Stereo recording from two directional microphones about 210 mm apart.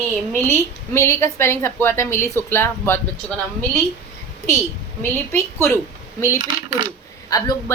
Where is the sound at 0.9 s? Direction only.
15° left (ahead or behind).